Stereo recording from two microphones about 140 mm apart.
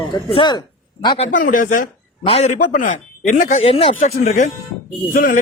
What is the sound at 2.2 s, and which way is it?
Speech, 50° left (ahead or behind).